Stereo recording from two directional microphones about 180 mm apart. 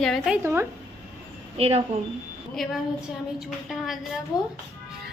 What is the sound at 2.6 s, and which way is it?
A woman's voice, centre (ahead or behind).